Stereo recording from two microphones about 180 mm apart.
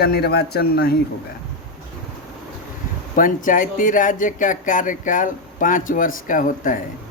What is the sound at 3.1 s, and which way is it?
Speech, 50° left (ahead or behind).